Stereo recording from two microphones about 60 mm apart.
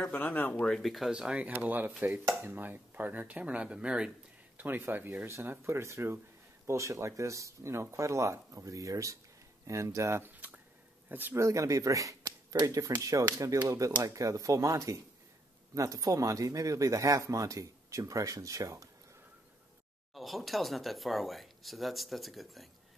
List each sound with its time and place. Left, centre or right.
0.1 s speech: left
0.7 s speech: centre
1.1 s speech: centre
1.6 s speech: right; by 4.1 s centre
4.6 s speech: right
10.2 s a sound: right
11.1 s speech: right
11.3 s speech: right
12.3 s speech: right
20.2 s speech: centre